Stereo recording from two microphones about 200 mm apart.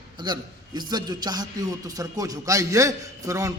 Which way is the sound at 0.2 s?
20° right (ahead or behind).